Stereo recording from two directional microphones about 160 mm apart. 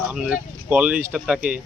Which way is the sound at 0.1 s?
5° right (ahead or behind).